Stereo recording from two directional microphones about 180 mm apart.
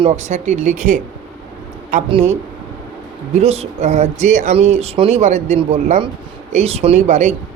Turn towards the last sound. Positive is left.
turn(degrees=-40)  # may be behind; listen again after turning